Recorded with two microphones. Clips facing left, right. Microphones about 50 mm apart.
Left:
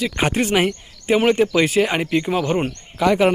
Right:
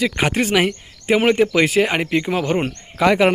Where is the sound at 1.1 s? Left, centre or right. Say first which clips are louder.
Right 1 dB; right.